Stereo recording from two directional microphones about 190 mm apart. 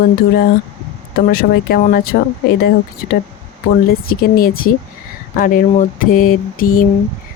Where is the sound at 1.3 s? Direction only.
50° left (ahead or behind).